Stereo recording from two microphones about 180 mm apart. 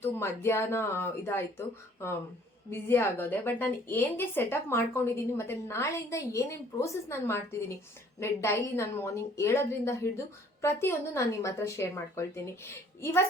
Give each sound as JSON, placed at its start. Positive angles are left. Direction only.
{"t": 0.0, "sound": "a woman's voice", "side_deg": 15}